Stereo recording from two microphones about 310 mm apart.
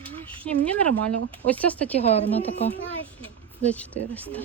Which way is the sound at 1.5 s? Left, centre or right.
Centre.